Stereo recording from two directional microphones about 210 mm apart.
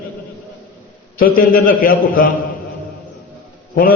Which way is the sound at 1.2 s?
45° left (ahead or behind).